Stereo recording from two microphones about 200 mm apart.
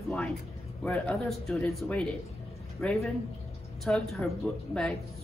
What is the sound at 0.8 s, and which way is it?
Speech, 5° left (ahead or behind).